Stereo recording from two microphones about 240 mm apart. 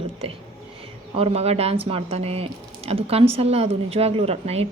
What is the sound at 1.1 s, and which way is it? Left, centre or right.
Speech, right.